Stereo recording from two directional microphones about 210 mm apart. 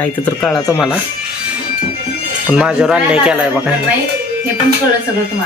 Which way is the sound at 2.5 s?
5° right (ahead or behind).